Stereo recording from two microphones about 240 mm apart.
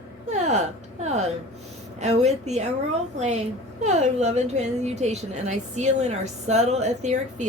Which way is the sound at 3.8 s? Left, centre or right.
Right.